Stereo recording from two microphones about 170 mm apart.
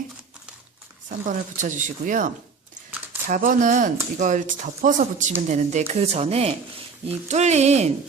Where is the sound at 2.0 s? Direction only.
50° right (ahead or behind).